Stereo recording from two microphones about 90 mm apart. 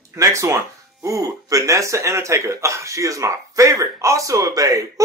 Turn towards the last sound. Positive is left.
turn(degrees=-40)  # may be behind; listen again after turning